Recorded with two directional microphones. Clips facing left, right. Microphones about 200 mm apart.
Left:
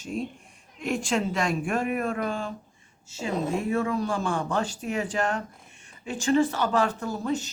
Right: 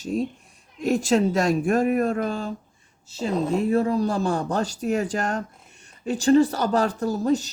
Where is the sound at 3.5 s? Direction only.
35° right (ahead or behind).